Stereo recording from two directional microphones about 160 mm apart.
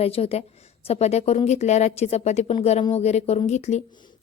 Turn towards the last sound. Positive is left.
turn(degrees=45)  # may be behind; listen again after turning